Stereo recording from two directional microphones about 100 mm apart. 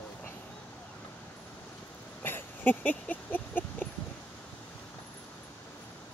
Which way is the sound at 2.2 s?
20° left (ahead or behind).